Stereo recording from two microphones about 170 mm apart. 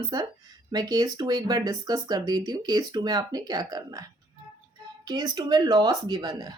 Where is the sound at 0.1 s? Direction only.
20° right (ahead or behind).